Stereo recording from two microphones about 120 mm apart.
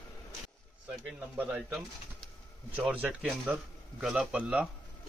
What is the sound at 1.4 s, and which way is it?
Speech, 10° right (ahead or behind).